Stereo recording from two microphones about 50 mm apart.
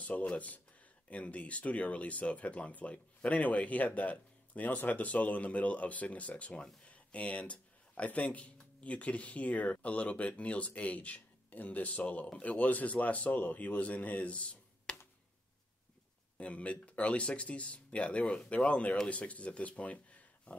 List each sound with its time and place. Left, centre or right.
0.0 s speech: left
16.3 s speech: left